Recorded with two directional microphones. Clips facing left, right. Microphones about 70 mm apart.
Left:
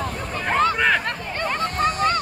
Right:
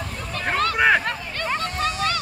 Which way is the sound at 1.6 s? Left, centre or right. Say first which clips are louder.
Left 7 dB; left.